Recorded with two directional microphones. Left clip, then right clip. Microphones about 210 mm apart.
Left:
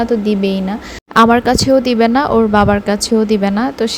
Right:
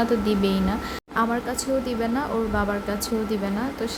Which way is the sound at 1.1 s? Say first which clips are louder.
Left 15 dB; 45° left (ahead or behind).